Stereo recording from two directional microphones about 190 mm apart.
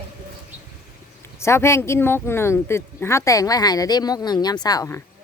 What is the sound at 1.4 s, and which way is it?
Speech, 15° left (ahead or behind).